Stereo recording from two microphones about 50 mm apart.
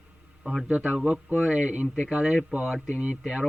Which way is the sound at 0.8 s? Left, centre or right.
Centre.